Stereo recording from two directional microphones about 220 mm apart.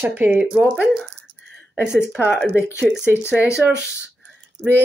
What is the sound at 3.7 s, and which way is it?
Speech, 50° right (ahead or behind).